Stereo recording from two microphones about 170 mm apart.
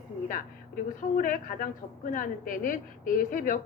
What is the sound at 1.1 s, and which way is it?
A woman's voice, 55° left (ahead or behind).